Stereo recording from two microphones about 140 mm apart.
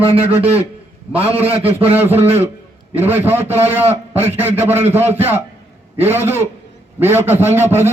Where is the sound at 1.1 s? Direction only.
45° right (ahead or behind).